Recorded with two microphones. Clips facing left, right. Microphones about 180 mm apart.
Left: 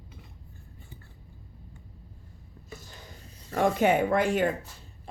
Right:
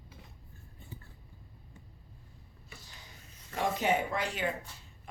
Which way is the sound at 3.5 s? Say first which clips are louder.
Left 7 dB; 55° left (ahead or behind).